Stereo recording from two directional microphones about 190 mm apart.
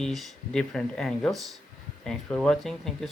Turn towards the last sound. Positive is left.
turn(degrees=0)  # may be behind; listen again after turning